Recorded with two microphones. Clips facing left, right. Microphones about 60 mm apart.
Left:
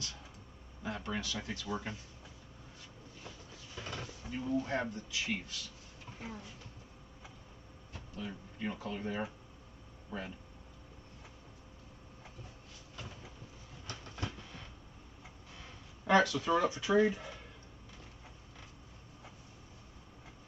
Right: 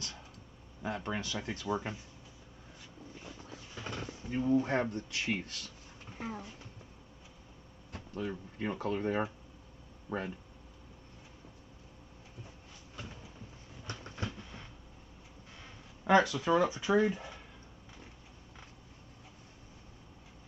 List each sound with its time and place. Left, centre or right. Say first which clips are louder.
0.8 s speech: right 2 dB; right
3.7 s a sound: right 1 dB; right
4.0 s a sound: right 9 dB; right
4.6 s speech: right 4 dB; right
7.9 s speech: right 6 dB; right
13.8 s train: right 2 dB; right
16.1 s speech: right 2 dB; centre